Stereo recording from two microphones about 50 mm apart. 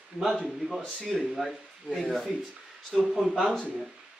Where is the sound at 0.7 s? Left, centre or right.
Centre.